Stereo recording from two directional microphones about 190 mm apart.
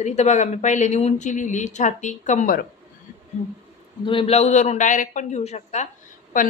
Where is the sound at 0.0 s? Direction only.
35° left (ahead or behind).